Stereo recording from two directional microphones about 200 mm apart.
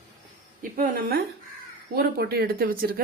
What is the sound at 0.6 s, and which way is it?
Speech, 45° right (ahead or behind).